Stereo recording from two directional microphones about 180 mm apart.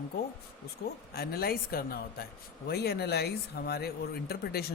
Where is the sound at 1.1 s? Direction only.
55° left (ahead or behind).